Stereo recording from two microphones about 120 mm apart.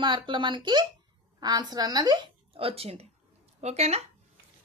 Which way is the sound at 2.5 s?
50° right (ahead or behind).